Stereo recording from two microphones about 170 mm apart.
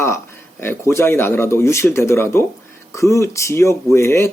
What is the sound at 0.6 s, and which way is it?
Speech, 15° left (ahead or behind).